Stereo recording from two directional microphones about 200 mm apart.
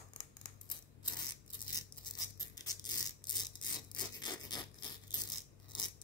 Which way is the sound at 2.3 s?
20° left (ahead or behind).